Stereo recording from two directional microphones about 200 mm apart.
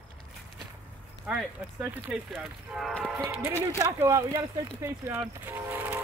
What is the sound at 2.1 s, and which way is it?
A man's voice, 5° right (ahead or behind).